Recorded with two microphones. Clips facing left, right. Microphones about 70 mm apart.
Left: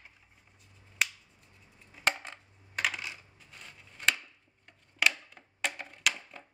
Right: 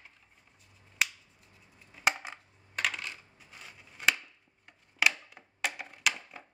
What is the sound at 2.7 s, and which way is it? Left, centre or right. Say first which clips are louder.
Coin: even; centre.